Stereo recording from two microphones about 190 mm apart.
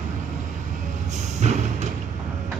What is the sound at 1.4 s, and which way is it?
Music, 40° right (ahead or behind).